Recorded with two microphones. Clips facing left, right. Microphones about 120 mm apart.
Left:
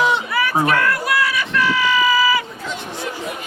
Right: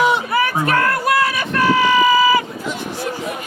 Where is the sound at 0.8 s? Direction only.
45° right (ahead or behind).